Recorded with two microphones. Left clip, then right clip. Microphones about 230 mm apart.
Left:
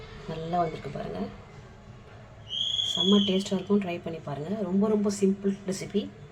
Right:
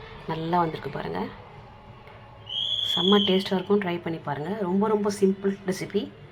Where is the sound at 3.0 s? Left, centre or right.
Centre.